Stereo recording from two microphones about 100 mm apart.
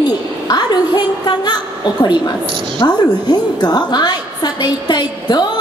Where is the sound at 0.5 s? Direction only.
45° left (ahead or behind).